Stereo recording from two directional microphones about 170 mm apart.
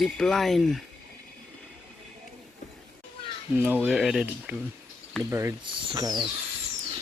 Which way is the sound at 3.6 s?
10° right (ahead or behind).